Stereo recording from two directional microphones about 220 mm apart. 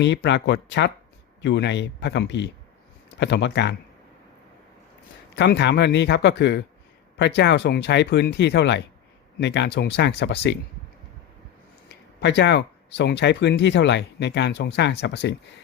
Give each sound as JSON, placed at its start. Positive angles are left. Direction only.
{"t": 0.0, "sound": "speech", "side_deg": 50}
{"t": 5.4, "sound": "speech", "side_deg": 50}
{"t": 11.9, "sound": "speech", "side_deg": 50}